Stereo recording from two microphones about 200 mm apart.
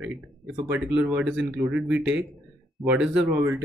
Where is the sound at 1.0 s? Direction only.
10° right (ahead or behind).